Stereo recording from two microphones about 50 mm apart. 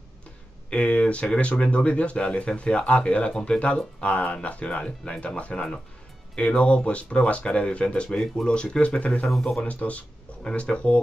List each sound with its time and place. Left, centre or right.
0.7 s speech: left
9.3 s speech: centre
9.7 s speech: left